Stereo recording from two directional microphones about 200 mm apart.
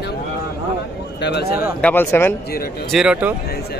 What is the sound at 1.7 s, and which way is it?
Speech, 10° left (ahead or behind).